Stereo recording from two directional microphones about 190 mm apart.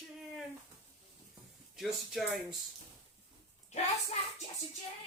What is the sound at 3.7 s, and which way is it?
Speech, 35° left (ahead or behind).